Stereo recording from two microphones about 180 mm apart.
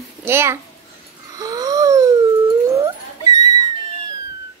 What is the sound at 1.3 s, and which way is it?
Wheeze, 20° right (ahead or behind).